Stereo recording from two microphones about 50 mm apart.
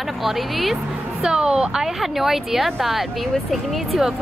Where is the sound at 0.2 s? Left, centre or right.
Centre.